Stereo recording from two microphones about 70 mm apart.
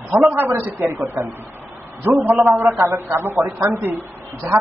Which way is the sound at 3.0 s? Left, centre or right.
Right.